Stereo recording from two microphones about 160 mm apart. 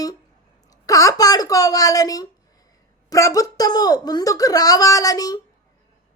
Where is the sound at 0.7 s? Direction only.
20° left (ahead or behind).